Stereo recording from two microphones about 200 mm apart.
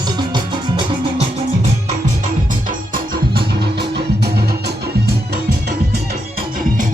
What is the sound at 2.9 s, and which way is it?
Music, 55° right (ahead or behind).